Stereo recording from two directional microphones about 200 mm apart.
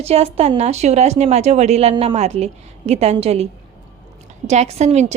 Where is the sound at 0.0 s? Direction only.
30° right (ahead or behind).